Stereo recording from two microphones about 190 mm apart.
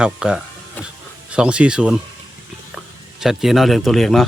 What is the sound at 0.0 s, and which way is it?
Speech, 5° right (ahead or behind).